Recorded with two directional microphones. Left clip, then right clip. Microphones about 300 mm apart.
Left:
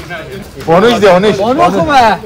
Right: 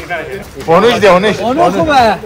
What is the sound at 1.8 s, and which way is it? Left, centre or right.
Speech, centre.